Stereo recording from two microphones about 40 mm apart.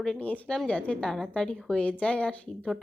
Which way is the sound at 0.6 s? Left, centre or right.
Left.